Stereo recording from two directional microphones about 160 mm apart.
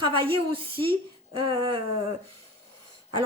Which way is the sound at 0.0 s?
35° right (ahead or behind).